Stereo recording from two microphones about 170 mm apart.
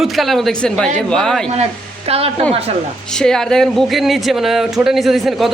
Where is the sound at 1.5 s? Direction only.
40° right (ahead or behind).